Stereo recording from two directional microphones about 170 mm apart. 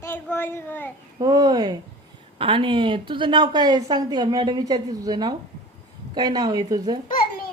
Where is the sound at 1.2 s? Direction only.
20° right (ahead or behind).